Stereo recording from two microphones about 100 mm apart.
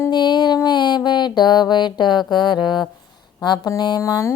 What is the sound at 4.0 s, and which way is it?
Music, 35° left (ahead or behind).